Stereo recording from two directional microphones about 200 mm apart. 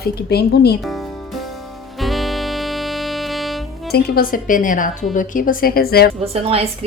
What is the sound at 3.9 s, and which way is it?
A woman's voice, 50° left (ahead or behind).